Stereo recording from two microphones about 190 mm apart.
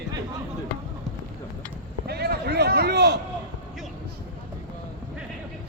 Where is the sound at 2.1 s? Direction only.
55° right (ahead or behind).